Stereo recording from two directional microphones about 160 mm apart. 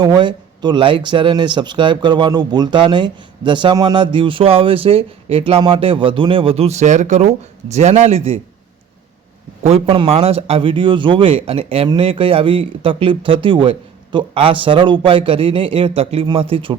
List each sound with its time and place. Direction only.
0.0 s speech: 30° right (ahead or behind)
9.6 s speech: 40° right (ahead or behind)